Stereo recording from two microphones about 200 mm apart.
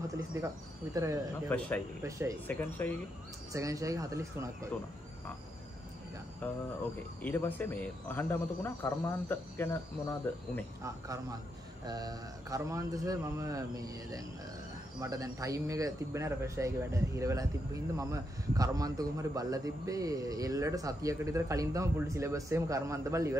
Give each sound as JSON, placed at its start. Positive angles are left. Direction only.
{"t": 0.3, "sound": "a man's voice", "side_deg": -15}
{"t": 1.5, "sound": "speech", "side_deg": 10}
{"t": 2.0, "sound": "a man's voice", "side_deg": -15}
{"t": 2.4, "sound": "speech", "side_deg": 10}
{"t": 3.5, "sound": "a man's voice", "side_deg": -15}
{"t": 6.4, "sound": "speech", "side_deg": 10}
{"t": 10.8, "sound": "a man's voice", "side_deg": -15}